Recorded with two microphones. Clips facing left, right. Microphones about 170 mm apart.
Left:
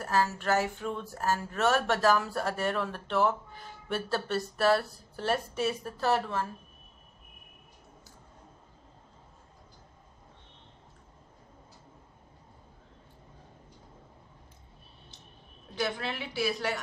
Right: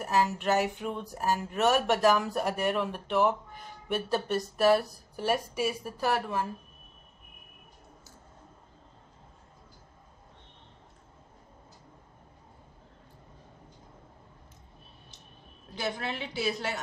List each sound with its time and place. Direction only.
0.0 s speech: 15° right (ahead or behind)
15.7 s a woman's voice: 20° right (ahead or behind)